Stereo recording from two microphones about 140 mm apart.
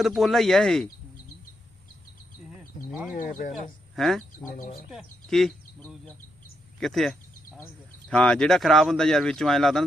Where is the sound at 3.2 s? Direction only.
70° left (ahead or behind).